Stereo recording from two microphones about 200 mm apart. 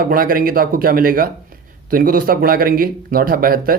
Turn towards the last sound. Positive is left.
turn(degrees=-45)  # may be behind; listen again after turning